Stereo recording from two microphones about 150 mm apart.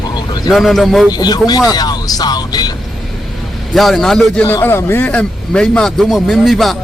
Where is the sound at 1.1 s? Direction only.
25° left (ahead or behind).